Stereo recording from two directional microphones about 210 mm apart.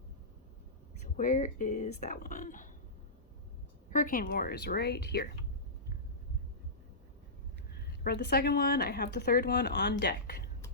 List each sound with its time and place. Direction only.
1.0 s speech: 35° left (ahead or behind)
3.9 s a woman's voice: 40° left (ahead or behind)
7.7 s a woman's voice: 50° left (ahead or behind)